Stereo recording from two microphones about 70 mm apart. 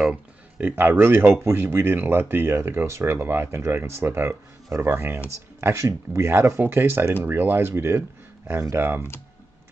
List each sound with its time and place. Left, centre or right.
0.0 s speech: centre; by 6.3 s right
6.6 s speech: right